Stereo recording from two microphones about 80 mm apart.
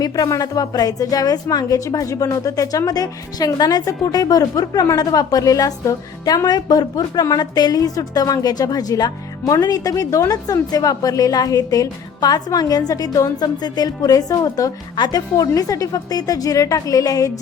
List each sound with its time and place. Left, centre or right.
0.0 s a woman's voice: left
13.4 s a woman's voice: left